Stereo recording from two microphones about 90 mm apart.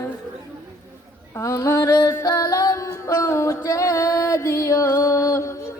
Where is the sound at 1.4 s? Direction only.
35° left (ahead or behind).